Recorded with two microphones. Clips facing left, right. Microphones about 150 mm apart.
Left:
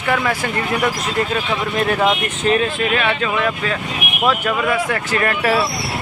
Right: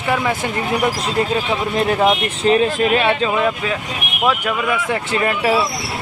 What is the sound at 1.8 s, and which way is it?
Speech, 25° right (ahead or behind).